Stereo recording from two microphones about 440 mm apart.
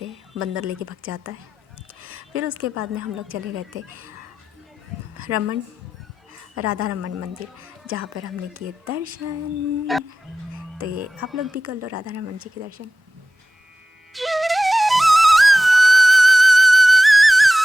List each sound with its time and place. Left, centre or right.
0.0 s a woman's voice: right
5.1 s a woman's voice: right
6.6 s speech: right
11.2 s speech: centre
11.5 s speech: right
14.1 s flute: centre